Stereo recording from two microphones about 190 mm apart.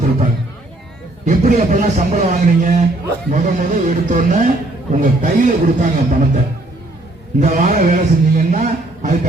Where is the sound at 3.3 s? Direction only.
40° right (ahead or behind).